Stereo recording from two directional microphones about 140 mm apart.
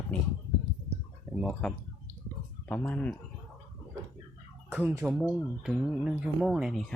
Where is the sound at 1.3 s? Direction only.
5° right (ahead or behind).